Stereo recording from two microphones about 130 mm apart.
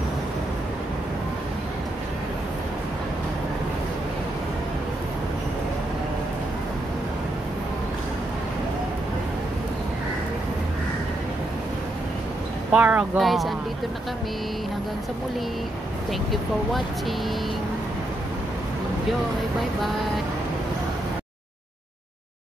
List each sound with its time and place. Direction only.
12.7 s speech: 10° right (ahead or behind)
13.2 s speech: centre (ahead or behind)
16.1 s speech: centre (ahead or behind)